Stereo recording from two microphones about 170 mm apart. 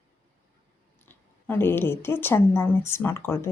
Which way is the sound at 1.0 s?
10° left (ahead or behind).